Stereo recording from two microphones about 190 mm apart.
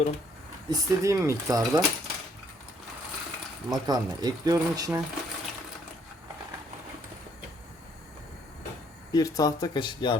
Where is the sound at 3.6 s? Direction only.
20° right (ahead or behind).